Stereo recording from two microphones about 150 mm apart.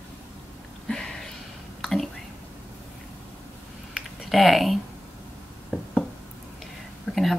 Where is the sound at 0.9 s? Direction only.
5° left (ahead or behind).